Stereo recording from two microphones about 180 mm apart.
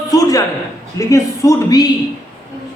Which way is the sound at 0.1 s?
20° left (ahead or behind).